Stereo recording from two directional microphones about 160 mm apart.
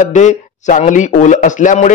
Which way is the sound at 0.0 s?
50° left (ahead or behind).